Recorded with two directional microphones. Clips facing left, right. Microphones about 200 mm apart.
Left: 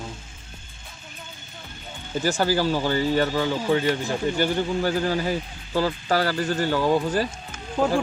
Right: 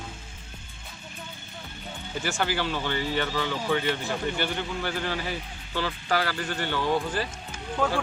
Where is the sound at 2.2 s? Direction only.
40° left (ahead or behind).